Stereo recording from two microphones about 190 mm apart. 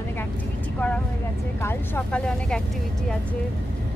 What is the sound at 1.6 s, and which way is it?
Speech, 10° left (ahead or behind).